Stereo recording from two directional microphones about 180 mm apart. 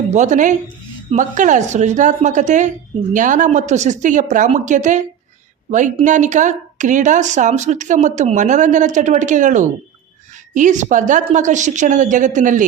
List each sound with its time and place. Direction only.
0.1 s speech: 40° right (ahead or behind)